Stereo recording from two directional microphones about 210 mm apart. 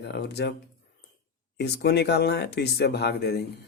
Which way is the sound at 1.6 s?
50° left (ahead or behind).